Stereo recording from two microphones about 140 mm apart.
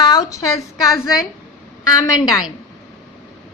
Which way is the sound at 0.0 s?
25° left (ahead or behind).